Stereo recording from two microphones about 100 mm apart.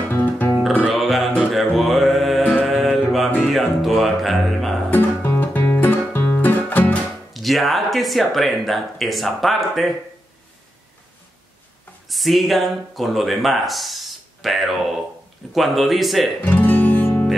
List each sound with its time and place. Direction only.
0.1 s music: 20° left (ahead or behind)
0.8 s music: centre (ahead or behind)
4.9 s music: 20° left (ahead or behind)
7.3 s speech: centre (ahead or behind)
12.1 s speech: centre (ahead or behind)
16.3 s guitar: 20° left (ahead or behind)